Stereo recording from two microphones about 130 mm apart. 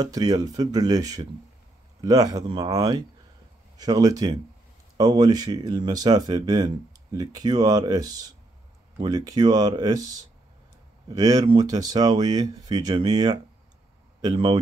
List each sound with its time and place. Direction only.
0.0 s speech: 30° right (ahead or behind)